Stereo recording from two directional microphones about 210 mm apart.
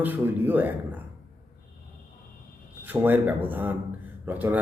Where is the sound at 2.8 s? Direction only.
10° right (ahead or behind).